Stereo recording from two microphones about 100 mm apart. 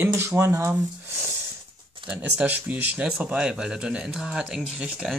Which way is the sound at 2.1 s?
15° right (ahead or behind).